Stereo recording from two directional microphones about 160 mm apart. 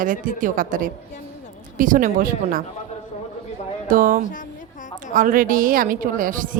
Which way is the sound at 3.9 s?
55° right (ahead or behind).